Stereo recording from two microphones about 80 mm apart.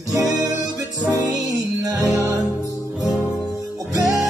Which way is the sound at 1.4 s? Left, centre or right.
Right.